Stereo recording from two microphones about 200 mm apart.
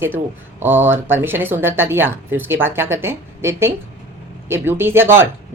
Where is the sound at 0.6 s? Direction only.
10° right (ahead or behind).